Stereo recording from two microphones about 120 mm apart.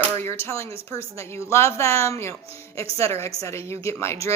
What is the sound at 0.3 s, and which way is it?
Speech, 20° left (ahead or behind).